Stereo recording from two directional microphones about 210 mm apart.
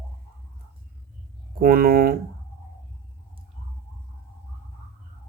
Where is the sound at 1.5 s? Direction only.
45° right (ahead or behind).